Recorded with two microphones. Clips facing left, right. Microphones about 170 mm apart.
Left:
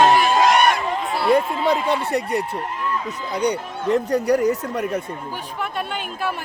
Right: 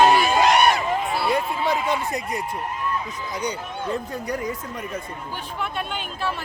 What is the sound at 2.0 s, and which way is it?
Speech, 65° left (ahead or behind).